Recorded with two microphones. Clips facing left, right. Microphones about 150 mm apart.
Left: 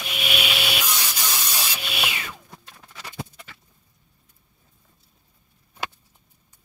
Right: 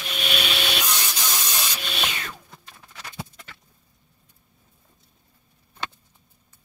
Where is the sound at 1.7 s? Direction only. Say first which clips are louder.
Even; 5° left (ahead or behind).